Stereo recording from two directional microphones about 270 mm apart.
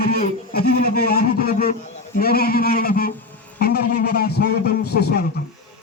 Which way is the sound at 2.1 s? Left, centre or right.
Left.